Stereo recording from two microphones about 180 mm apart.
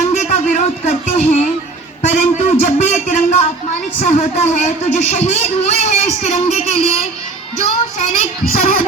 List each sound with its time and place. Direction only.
0.1 s music: 40° left (ahead or behind)
2.0 s a sound: 40° left (ahead or behind)
4.0 s a man's voice: 40° left (ahead or behind)
8.1 s a man's voice: 35° left (ahead or behind)